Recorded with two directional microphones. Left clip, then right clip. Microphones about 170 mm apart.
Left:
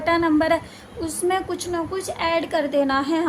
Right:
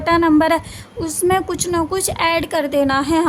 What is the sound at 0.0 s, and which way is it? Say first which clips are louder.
A woman's voice: right 5 dB; 30° right (ahead or behind).